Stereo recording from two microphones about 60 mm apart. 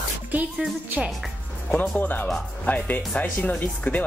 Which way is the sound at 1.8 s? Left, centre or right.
Left.